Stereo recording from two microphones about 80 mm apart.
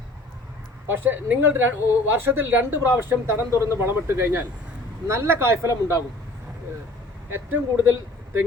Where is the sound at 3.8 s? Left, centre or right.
Right.